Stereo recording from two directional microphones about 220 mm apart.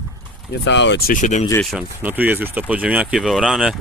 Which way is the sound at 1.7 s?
5° right (ahead or behind).